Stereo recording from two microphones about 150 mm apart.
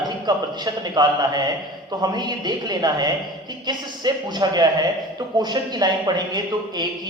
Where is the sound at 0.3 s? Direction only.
25° right (ahead or behind).